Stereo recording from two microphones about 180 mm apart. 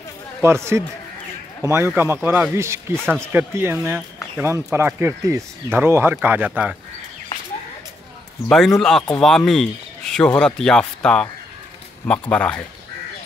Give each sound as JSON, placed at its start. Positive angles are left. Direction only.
{"t": 0.4, "sound": "speech", "side_deg": -15}
{"t": 8.5, "sound": "a man's voice", "side_deg": 0}